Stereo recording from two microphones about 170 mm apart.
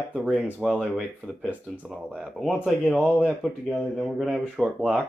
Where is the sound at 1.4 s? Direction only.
10° right (ahead or behind).